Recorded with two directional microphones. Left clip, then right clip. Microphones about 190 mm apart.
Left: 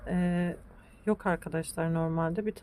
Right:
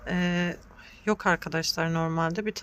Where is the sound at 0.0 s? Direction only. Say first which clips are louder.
Right 4 dB; 10° left (ahead or behind).